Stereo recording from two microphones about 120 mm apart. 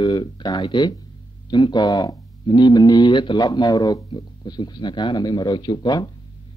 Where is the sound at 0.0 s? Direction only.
35° left (ahead or behind).